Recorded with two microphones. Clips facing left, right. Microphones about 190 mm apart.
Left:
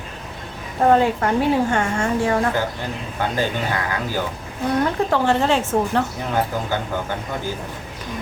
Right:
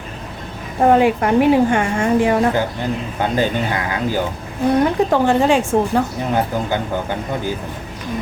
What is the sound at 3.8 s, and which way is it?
Speech, 15° right (ahead or behind).